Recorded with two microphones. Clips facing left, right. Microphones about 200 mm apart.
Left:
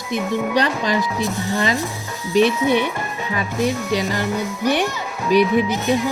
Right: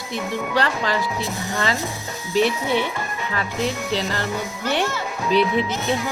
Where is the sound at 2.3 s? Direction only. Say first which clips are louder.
Left 4 dB; 15° left (ahead or behind).